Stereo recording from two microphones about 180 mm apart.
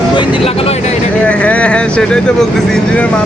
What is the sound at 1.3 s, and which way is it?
Speech, 5° left (ahead or behind).